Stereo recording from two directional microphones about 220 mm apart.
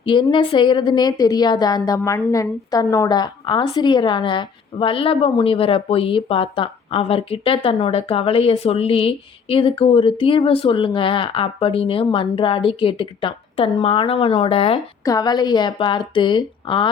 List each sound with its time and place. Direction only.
0.0 s a woman's voice: 20° left (ahead or behind)